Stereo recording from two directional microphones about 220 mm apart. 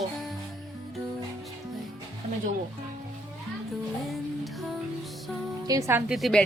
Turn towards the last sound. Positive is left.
turn(degrees=0)  # may be behind; listen again after turning